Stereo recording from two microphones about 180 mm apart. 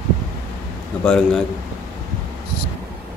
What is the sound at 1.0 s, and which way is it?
Speech, 5° left (ahead or behind).